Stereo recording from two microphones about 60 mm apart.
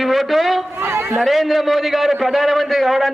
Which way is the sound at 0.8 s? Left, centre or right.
Right.